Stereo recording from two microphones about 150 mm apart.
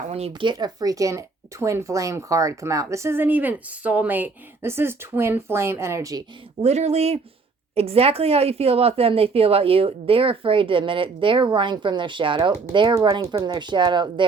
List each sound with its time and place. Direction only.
0.1 s speech: 40° right (ahead or behind); by 6.2 s 20° right (ahead or behind)
6.6 s speech: 45° right (ahead or behind); by 14.3 s 30° right (ahead or behind)